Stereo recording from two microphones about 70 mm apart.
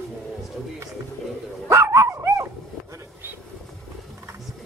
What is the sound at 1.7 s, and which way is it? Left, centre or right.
Dog, right.